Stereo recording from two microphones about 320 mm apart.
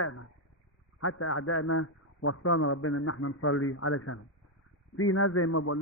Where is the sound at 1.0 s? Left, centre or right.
Left.